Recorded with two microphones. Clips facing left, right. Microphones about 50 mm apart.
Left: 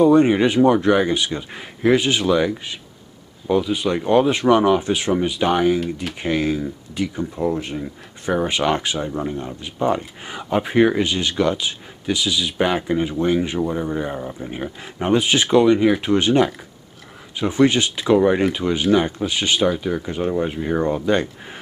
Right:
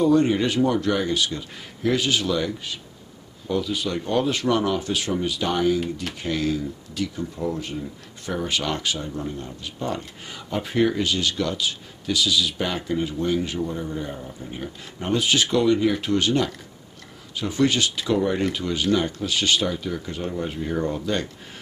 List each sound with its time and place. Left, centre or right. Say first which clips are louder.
0.0 s speech: left 5 dB; left